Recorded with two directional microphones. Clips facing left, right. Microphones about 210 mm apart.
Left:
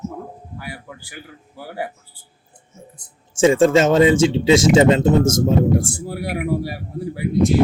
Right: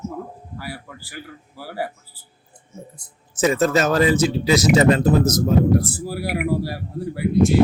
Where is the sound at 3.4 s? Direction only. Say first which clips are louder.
Left 5 dB; 25° left (ahead or behind).